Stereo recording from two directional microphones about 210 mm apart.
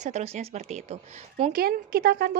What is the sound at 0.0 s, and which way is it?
A woman's voice, 35° right (ahead or behind).